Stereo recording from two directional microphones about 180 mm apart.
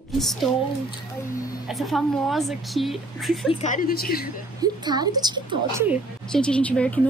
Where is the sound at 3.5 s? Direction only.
40° left (ahead or behind).